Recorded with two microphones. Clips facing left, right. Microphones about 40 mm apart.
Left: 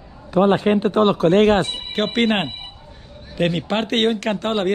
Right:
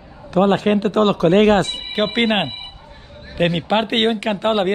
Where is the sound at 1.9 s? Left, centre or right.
Centre.